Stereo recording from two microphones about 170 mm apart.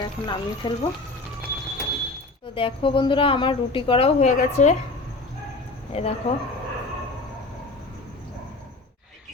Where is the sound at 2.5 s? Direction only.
30° left (ahead or behind).